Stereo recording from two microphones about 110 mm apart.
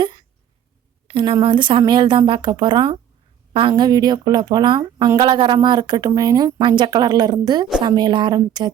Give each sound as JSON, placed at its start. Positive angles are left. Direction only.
{"t": 1.0, "sound": "a woman's voice", "side_deg": -50}